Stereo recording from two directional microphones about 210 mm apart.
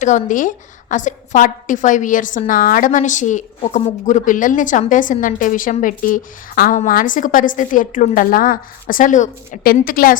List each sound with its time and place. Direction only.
0.0 s a woman's voice: 35° left (ahead or behind)